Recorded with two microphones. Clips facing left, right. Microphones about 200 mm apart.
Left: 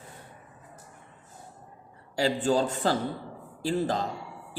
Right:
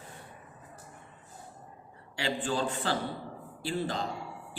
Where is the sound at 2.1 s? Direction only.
40° left (ahead or behind).